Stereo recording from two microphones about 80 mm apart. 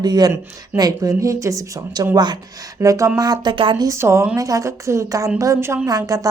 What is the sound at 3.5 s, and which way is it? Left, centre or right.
Speech, right.